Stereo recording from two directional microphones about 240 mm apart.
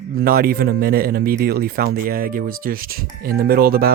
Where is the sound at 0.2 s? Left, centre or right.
Right.